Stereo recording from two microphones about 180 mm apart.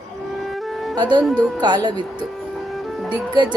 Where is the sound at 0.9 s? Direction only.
25° right (ahead or behind).